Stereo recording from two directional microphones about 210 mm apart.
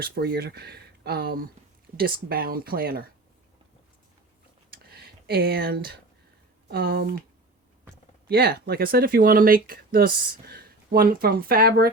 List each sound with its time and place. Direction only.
0.0 s speech: 45° right (ahead or behind)
4.9 s speech: 50° right (ahead or behind)
8.3 s speech: 50° right (ahead or behind)